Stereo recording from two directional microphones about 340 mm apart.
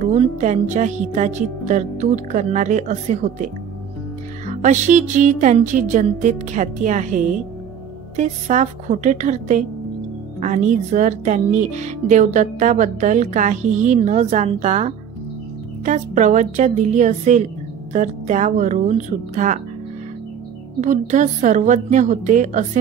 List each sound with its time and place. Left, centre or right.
0.0 s speech: centre
4.5 s speech: right
8.2 s speech: right
20.8 s speech: right